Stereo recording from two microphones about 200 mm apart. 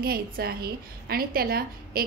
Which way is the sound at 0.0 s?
50° right (ahead or behind).